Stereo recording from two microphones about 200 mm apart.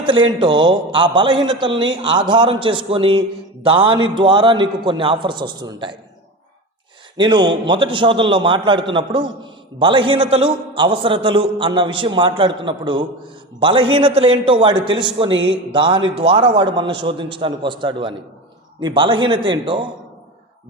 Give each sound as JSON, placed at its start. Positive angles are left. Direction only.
{"t": 0.0, "sound": "a man's voice", "side_deg": -25}
{"t": 7.2, "sound": "a man's voice", "side_deg": -25}